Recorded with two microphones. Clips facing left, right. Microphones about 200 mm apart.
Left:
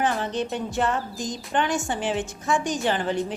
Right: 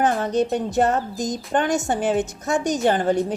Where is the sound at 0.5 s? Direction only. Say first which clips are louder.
Right 5 dB; 40° right (ahead or behind).